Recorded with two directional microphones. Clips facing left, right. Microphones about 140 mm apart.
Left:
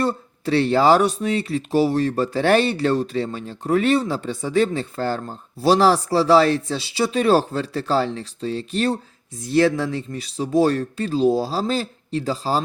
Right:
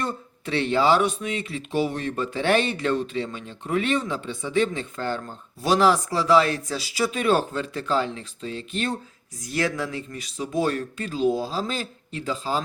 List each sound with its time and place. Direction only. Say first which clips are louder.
0.0 s speech: left 7 dB; 35° left (ahead or behind)